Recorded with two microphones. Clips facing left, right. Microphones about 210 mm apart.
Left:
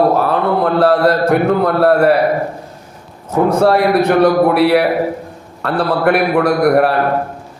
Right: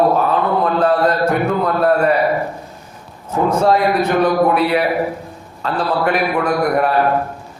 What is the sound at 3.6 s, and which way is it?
A man's voice, 65° left (ahead or behind).